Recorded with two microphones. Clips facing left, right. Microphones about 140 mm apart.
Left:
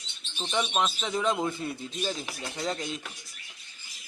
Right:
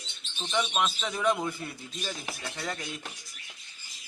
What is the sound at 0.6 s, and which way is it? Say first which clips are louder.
Speech: left 1 dB; 20° left (ahead or behind).